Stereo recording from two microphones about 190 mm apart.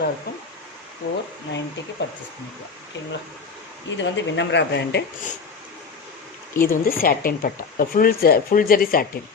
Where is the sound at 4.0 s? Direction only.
70° left (ahead or behind).